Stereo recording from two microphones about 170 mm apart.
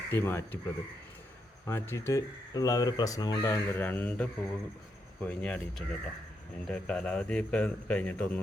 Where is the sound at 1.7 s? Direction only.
15° left (ahead or behind).